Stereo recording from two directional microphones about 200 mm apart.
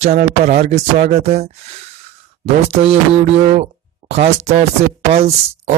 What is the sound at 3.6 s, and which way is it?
Speech, 35° right (ahead or behind).